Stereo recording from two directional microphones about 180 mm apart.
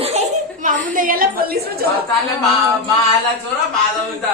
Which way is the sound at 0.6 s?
50° right (ahead or behind).